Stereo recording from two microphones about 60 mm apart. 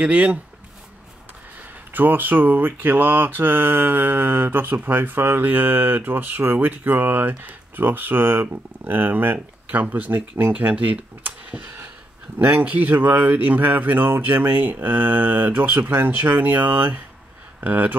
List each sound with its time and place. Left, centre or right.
0.0 s speech: right
2.0 s mantra: right
12.6 s mantra: right
17.6 s speech: right